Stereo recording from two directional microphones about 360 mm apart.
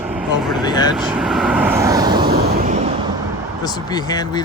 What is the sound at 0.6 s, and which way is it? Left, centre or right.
Speech, centre.